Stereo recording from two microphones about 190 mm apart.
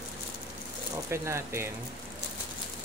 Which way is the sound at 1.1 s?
15° right (ahead or behind).